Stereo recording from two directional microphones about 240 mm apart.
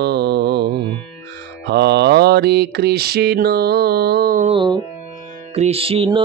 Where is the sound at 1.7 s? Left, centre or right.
Right.